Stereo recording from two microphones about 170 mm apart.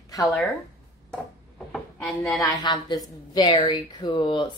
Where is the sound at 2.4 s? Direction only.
25° left (ahead or behind).